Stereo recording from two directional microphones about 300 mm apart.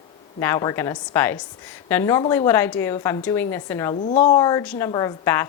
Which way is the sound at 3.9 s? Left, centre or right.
Left.